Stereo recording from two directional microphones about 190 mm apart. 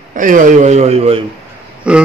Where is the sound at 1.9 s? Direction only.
5° right (ahead or behind).